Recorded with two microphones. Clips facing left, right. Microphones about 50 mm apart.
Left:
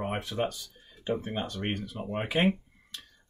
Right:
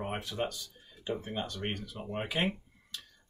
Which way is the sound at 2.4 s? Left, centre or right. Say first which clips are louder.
Left 8 dB; left.